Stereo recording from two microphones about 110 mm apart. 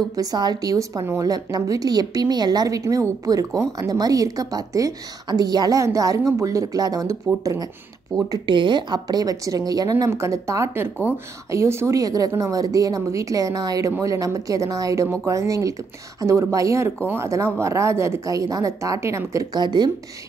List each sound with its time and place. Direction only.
0.1 s a woman's voice: 35° right (ahead or behind)
8.3 s a woman's voice: 45° right (ahead or behind); by 19.6 s 30° right (ahead or behind)
19.6 s a woman's voice: 40° right (ahead or behind)